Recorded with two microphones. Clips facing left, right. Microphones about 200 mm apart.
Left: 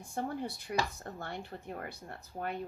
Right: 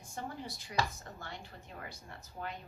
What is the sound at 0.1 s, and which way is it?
Speech, 60° left (ahead or behind).